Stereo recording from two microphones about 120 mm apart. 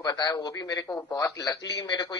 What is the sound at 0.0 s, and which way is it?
Speech, 35° left (ahead or behind).